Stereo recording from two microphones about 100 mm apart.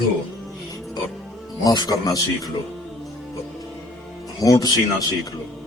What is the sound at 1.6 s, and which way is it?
Speech, 40° left (ahead or behind).